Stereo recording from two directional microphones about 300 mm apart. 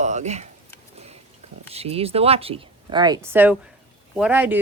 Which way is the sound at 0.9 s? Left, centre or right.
Right.